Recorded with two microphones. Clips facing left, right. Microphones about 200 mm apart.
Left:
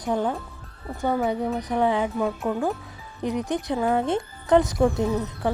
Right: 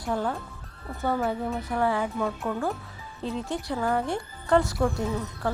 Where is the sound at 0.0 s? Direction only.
20° left (ahead or behind).